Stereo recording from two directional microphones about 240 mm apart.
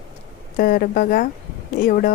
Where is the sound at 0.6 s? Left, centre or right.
Left.